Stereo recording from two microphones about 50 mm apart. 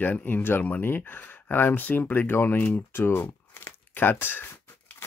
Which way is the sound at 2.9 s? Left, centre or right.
Left.